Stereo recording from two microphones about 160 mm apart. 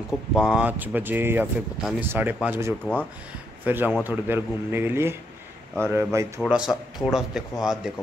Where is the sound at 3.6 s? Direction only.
10° right (ahead or behind).